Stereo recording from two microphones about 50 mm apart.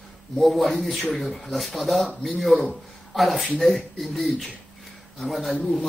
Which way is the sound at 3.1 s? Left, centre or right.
Centre.